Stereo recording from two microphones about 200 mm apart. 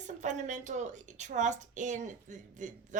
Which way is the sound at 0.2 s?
35° right (ahead or behind).